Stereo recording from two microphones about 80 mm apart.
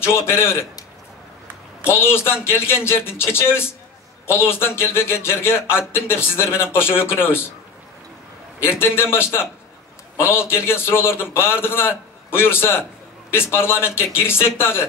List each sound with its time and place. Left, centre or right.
0.0 s a man's voice: left
1.9 s a man's voice: left
8.5 s a man's voice: left